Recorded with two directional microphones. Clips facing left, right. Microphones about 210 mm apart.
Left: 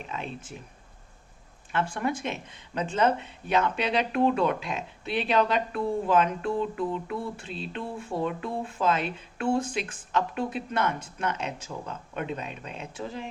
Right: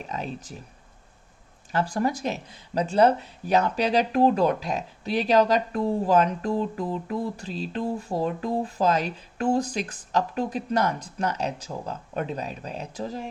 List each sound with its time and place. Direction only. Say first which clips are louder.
0.0 s speech: right 3 dB; 40° right (ahead or behind)
1.7 s speech: right 3 dB; 35° right (ahead or behind)